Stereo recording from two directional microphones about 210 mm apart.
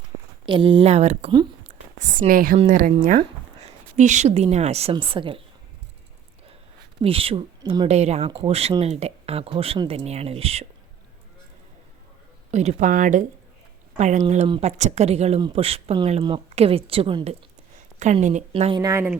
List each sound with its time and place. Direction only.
0.4 s speech: 25° right (ahead or behind)
1.6 s a sound: 35° right (ahead or behind)
2.6 s a woman's voice: 40° right (ahead or behind)
7.0 s speech: 25° right (ahead or behind)
12.5 s a woman's voice: 35° right (ahead or behind); by 19.1 s 15° right (ahead or behind)